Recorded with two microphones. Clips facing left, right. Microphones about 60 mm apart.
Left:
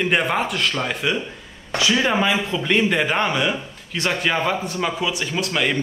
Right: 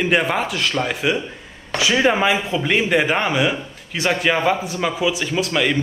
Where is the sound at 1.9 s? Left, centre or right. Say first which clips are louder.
Right 3 dB; centre.